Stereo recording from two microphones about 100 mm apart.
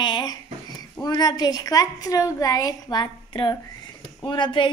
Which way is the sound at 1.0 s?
40° left (ahead or behind).